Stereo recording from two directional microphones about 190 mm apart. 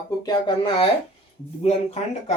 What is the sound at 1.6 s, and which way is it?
Speech, 35° left (ahead or behind).